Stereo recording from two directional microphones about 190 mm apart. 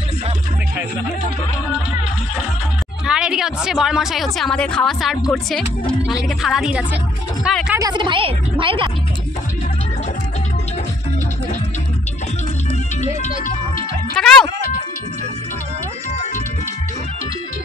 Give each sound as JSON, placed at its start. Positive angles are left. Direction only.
{"t": 3.1, "sound": "a woman's voice", "side_deg": -5}
{"t": 7.8, "sound": "a woman's voice", "side_deg": -25}
{"t": 14.2, "sound": "music", "side_deg": 5}